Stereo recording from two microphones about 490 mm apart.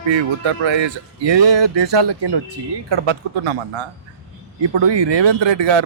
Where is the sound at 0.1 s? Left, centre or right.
Right.